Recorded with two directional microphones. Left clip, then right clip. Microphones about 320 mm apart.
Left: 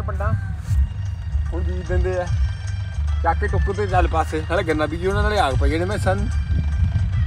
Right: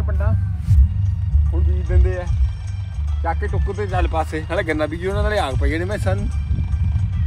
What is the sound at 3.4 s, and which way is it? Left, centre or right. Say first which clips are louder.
Speech: left 2 dB; left.